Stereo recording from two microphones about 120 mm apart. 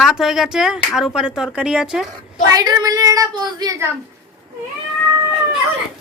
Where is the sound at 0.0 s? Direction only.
5° right (ahead or behind).